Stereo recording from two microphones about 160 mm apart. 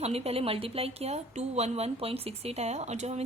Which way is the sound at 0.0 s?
40° right (ahead or behind).